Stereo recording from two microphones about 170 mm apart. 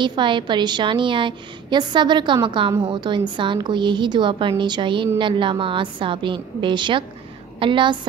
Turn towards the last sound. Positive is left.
turn(degrees=-30)  # may be behind; listen again after turning